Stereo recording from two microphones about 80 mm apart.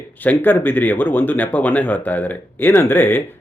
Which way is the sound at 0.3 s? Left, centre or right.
Left.